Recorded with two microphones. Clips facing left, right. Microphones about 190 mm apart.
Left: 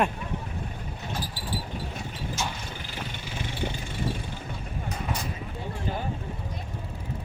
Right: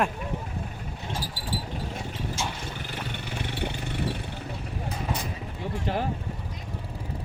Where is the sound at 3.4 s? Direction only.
65° right (ahead or behind).